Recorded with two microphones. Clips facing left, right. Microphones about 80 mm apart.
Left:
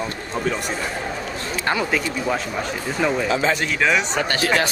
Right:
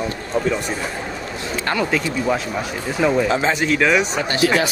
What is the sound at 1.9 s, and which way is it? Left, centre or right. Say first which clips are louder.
Speech: right 2 dB; centre.